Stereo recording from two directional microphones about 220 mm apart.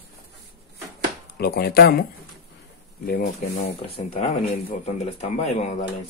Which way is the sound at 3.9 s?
30° left (ahead or behind).